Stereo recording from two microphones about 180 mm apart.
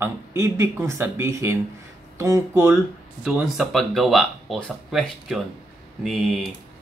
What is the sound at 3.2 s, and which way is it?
Speech, centre (ahead or behind).